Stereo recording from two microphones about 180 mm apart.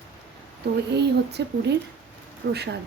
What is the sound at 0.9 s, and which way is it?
Speech, 70° right (ahead or behind).